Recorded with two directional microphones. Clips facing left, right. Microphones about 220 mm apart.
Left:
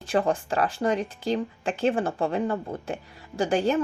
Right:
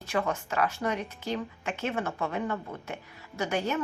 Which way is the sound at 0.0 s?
30° left (ahead or behind).